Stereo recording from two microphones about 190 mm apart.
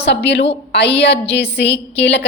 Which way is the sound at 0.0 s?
60° left (ahead or behind).